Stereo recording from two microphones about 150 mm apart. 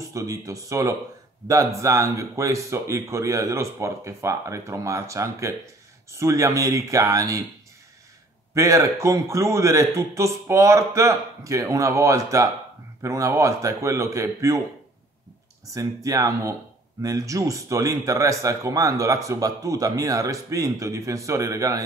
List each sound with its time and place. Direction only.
0.0 s a man's voice: 20° right (ahead or behind)
8.5 s a man's voice: 20° right (ahead or behind)
15.7 s a man's voice: 20° right (ahead or behind)